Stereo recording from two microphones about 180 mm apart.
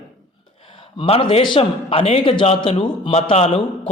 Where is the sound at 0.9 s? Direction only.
30° left (ahead or behind).